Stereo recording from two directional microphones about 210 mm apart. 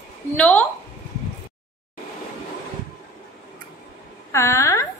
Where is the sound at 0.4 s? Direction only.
5° left (ahead or behind).